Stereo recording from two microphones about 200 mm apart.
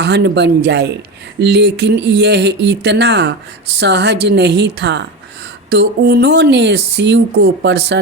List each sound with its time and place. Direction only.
0.0 s speech: 55° right (ahead or behind)